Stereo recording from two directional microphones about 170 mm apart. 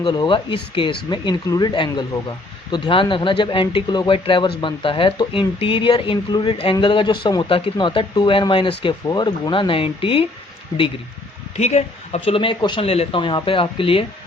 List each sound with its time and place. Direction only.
0.0 s speech: 25° left (ahead or behind)
11.5 s speech: 40° left (ahead or behind)